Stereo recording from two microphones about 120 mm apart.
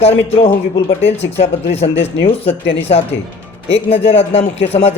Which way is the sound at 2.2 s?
50° left (ahead or behind).